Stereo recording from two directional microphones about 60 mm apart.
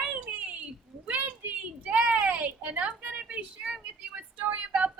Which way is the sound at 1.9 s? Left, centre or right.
Centre.